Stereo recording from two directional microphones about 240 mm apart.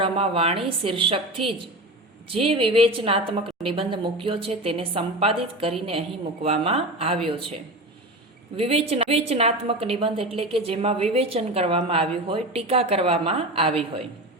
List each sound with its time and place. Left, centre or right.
0.0 s a woman's voice: right
2.3 s a woman's voice: right
8.5 s a woman's voice: right